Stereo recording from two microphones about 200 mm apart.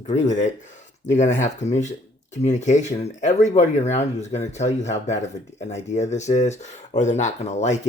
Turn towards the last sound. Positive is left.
turn(degrees=35)  # may be behind; listen again after turning